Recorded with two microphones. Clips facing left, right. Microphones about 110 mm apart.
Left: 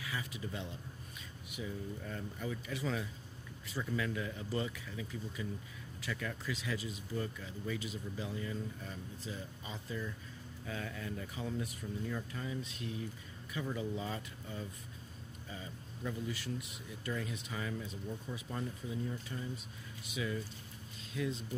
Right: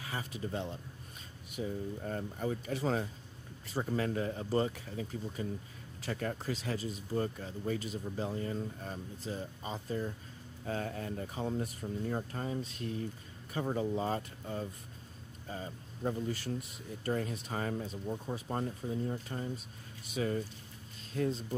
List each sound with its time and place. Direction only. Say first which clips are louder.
0.0 s speech: right 3 dB; 40° right (ahead or behind)